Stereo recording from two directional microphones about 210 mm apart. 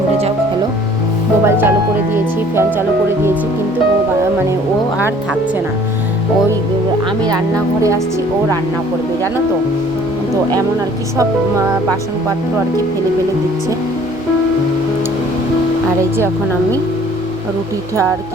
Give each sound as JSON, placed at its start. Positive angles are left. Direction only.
{"t": 1.5, "sound": "speech", "side_deg": -10}
{"t": 7.3, "sound": "speech", "side_deg": -15}
{"t": 11.2, "sound": "speech", "side_deg": -15}